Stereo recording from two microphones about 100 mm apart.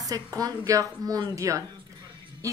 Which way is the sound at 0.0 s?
40° right (ahead or behind).